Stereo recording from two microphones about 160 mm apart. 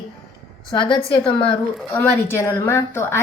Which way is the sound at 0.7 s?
30° left (ahead or behind).